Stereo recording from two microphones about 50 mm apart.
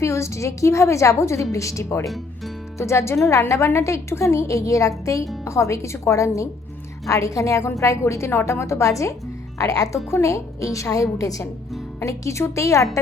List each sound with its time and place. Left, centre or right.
0.0 s a woman's voice: left
1.5 s speech: left
2.0 s speech: centre
2.7 s a woman's voice: left
9.6 s a woman's voice: left